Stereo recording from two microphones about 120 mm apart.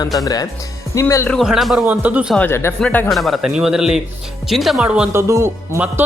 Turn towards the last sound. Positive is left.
turn(degrees=-15)  # may be behind; listen again after turning